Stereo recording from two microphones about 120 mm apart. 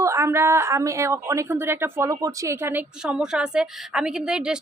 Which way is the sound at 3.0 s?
5° right (ahead or behind).